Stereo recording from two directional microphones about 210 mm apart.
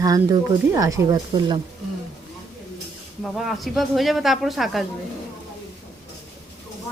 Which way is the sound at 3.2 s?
Centre (ahead or behind).